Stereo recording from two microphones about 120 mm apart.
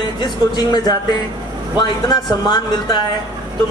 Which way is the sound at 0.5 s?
35° left (ahead or behind).